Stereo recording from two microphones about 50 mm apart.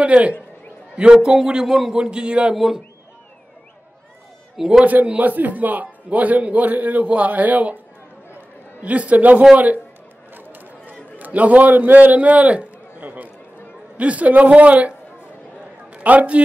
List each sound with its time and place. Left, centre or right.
0.0 s a man's voice: right; by 2.0 s centre
2.0 s a man's voice: centre
2.5 s a man's voice: centre
4.6 s a man's voice: centre
5.0 s a man's voice: right
8.8 s a man's voice: right
10.3 s a sound: right
13.9 s a man's voice: right